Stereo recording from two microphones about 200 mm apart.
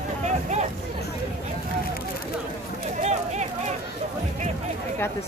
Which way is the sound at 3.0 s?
35° right (ahead or behind).